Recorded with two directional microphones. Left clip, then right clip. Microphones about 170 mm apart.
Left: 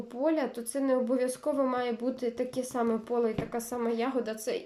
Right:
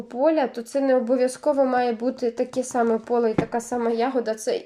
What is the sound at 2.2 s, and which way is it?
Speech, 15° left (ahead or behind).